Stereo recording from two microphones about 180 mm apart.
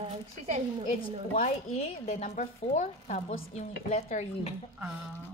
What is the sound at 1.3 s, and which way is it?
Speech, 40° left (ahead or behind).